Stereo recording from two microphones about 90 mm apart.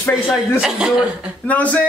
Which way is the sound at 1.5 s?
15° left (ahead or behind).